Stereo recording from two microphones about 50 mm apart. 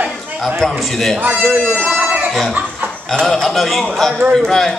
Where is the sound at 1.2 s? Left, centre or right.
Right.